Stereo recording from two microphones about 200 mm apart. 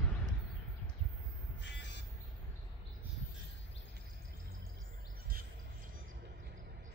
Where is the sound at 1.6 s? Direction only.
60° left (ahead or behind).